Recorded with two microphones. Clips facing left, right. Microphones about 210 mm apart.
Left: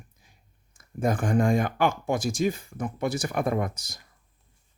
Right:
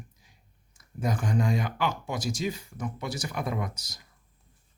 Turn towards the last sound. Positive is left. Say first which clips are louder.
# left 6 dB
turn(degrees=50)  # may be behind; listen again after turning